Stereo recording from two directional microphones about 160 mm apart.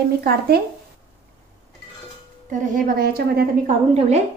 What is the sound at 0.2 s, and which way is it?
Speech, 70° right (ahead or behind).